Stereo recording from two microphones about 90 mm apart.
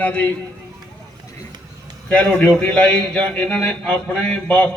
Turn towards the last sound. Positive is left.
turn(degrees=10)  # may be behind; listen again after turning